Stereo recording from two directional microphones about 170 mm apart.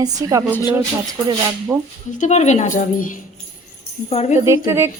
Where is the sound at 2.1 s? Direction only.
45° left (ahead or behind).